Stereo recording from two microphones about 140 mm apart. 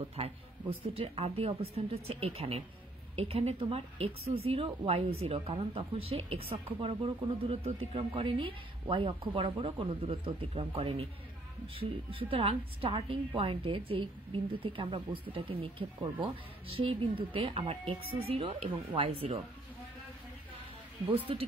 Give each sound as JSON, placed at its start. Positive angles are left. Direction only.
{"t": 0.0, "sound": "speech", "side_deg": -45}
{"t": 12.1, "sound": "speech", "side_deg": -40}
{"t": 21.1, "sound": "speech", "side_deg": -40}